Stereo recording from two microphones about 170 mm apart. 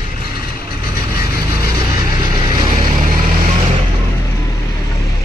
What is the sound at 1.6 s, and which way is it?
Vehicle, 25° right (ahead or behind).